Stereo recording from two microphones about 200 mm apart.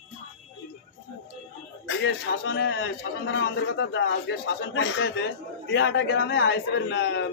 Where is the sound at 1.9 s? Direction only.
65° left (ahead or behind).